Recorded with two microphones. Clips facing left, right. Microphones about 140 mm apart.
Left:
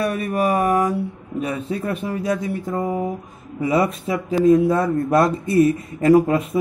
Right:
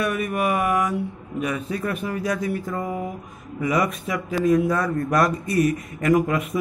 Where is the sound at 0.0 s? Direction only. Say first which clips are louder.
Left 3 dB; 30° left (ahead or behind).